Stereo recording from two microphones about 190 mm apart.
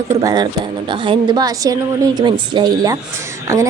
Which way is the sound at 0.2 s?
20° right (ahead or behind).